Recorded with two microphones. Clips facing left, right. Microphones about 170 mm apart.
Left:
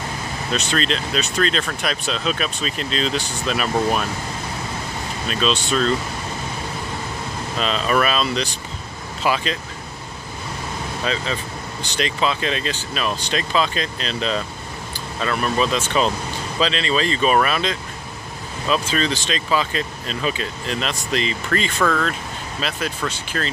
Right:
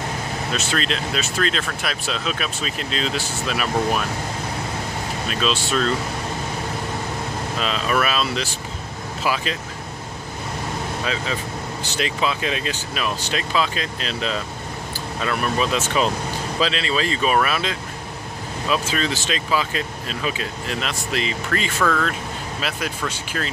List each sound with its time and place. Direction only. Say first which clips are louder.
0.5 s speech: left 3 dB; 5° right (ahead or behind)
5.3 s speech: left 2 dB; 5° right (ahead or behind)
7.6 s speech: left 3 dB; 5° right (ahead or behind)
11.1 s speech: left 4 dB; 5° right (ahead or behind)
21.8 s speech: even; 5° left (ahead or behind)
22.6 s speech: left 2 dB; 10° right (ahead or behind)